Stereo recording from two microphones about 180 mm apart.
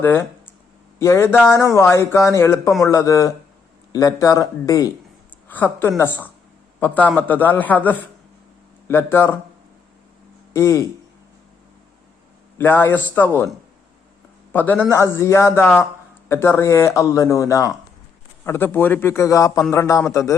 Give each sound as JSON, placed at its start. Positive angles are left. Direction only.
{"t": 0.0, "sound": "a sound", "side_deg": 10}
{"t": 0.9, "sound": "a woman's voice", "side_deg": 15}
{"t": 10.5, "sound": "speech", "side_deg": 15}
{"t": 12.5, "sound": "speech", "side_deg": 10}
{"t": 14.5, "sound": "a man's voice", "side_deg": 10}